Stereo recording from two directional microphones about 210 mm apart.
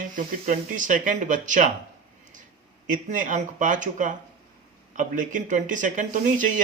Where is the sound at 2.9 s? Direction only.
40° right (ahead or behind).